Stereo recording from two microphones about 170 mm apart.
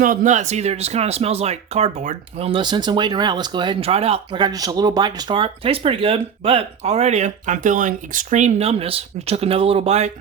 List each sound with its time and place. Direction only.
0.0 s speech: 50° right (ahead or behind)